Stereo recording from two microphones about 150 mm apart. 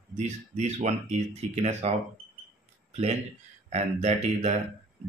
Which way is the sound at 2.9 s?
45° right (ahead or behind).